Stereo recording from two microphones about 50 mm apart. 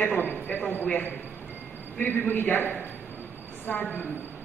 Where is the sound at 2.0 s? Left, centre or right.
Left.